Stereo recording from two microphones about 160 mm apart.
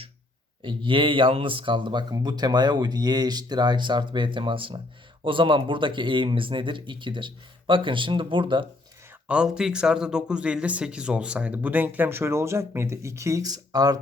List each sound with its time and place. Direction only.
0.6 s speech: 30° right (ahead or behind)
9.2 s speech: 5° right (ahead or behind); by 14.0 s 25° right (ahead or behind)